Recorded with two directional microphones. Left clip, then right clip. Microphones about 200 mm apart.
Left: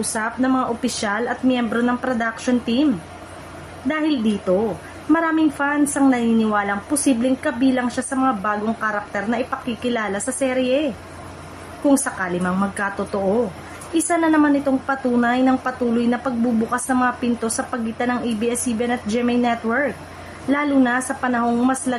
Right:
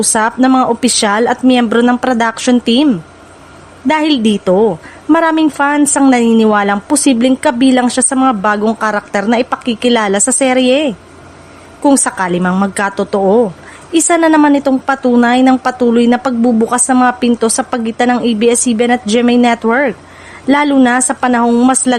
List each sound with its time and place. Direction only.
0.0 s a woman's voice: 50° right (ahead or behind)
11.9 s a woman's voice: 50° right (ahead or behind)